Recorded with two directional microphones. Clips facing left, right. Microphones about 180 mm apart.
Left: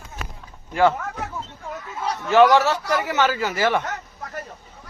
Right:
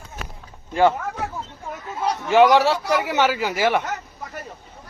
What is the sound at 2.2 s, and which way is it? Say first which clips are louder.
A man's voice: even; 15° right (ahead or behind).